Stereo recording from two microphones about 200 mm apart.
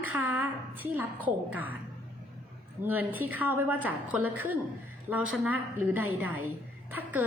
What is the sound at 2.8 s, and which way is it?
A woman's voice, 10° right (ahead or behind).